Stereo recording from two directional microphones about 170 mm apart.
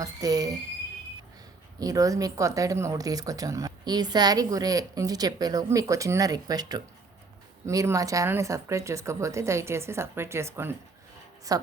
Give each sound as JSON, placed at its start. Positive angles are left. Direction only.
{"t": 0.0, "sound": "speech", "side_deg": -20}
{"t": 1.8, "sound": "a woman's voice", "side_deg": -20}